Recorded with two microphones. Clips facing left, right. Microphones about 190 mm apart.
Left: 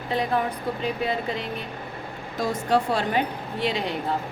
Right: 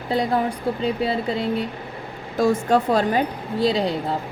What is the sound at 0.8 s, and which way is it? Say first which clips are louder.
Speech: right 3 dB; 35° right (ahead or behind).